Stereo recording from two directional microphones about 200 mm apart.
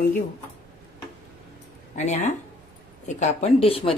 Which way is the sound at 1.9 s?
35° left (ahead or behind).